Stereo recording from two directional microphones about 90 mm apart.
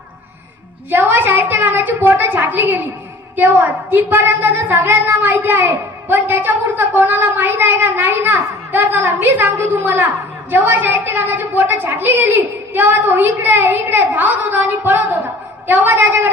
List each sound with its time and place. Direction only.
0.9 s a woman's voice: 20° right (ahead or behind)